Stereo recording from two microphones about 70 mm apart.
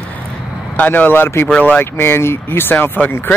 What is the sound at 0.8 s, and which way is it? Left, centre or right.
Speech, left.